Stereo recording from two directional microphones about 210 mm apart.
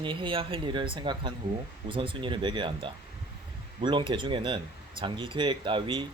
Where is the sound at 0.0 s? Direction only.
25° right (ahead or behind).